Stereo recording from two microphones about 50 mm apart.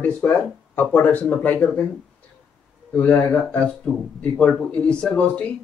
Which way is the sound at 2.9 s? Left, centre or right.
Left.